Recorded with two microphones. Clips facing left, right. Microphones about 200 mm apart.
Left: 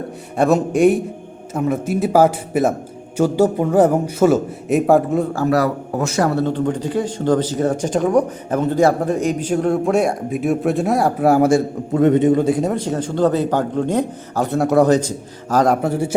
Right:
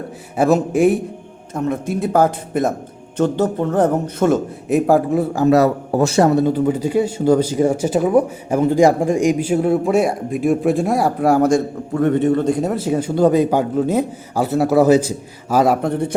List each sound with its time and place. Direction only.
0.3 s speech: centre (ahead or behind)
5.3 s speech: 20° right (ahead or behind)
6.3 s a man's voice: 10° right (ahead or behind); by 11.6 s 5° left (ahead or behind)
11.9 s speech: 20° left (ahead or behind)
12.5 s a man's voice: centre (ahead or behind)
15.8 s speech: 5° left (ahead or behind)